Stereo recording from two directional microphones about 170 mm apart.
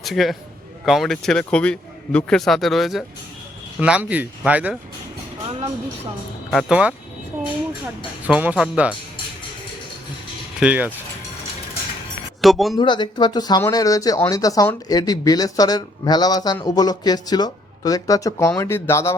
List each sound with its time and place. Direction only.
0.0 s a man's voice: centre (ahead or behind)
5.5 s music: 35° right (ahead or behind)
6.5 s a man's voice: centre (ahead or behind)
8.3 s speech: 10° right (ahead or behind)
10.6 s speech: 10° right (ahead or behind)
12.4 s speech: centre (ahead or behind)
12.7 s speech: 25° left (ahead or behind)